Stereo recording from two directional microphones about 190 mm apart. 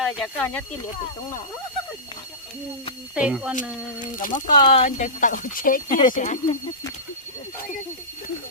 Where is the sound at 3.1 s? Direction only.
5° right (ahead or behind).